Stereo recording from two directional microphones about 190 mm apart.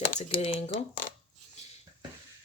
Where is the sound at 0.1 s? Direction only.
35° left (ahead or behind).